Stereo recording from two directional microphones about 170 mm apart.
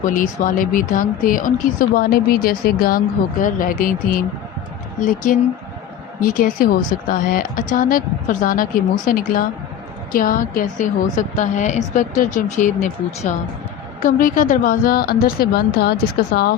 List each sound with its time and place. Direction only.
0.0 s a woman's voice: 50° left (ahead or behind); by 16.6 s 65° left (ahead or behind)